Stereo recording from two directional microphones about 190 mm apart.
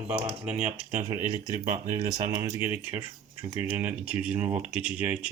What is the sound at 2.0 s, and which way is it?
Speech, 20° right (ahead or behind).